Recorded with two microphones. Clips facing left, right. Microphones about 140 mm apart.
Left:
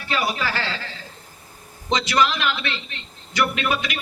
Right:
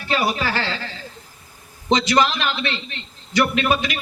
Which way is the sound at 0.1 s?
30° right (ahead or behind).